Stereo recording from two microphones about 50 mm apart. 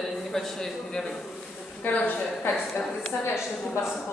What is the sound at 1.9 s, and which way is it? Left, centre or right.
Speech, left.